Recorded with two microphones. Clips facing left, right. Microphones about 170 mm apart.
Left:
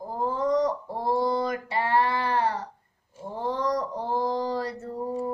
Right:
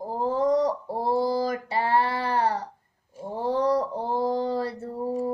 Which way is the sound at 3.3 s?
30° right (ahead or behind).